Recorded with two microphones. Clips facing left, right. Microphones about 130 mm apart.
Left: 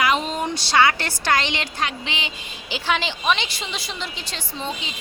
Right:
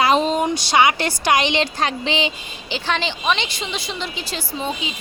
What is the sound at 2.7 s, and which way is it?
A woman's voice, 5° left (ahead or behind).